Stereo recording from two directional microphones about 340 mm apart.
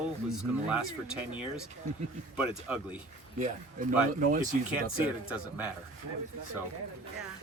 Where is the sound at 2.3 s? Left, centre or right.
Centre.